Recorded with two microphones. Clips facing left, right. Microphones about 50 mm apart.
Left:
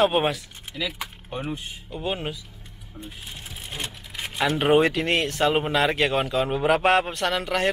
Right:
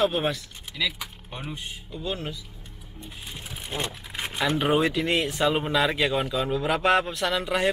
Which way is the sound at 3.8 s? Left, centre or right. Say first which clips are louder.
Right 1 dB; right.